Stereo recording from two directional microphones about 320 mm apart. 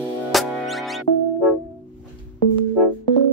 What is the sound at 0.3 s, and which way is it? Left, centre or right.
Music, centre.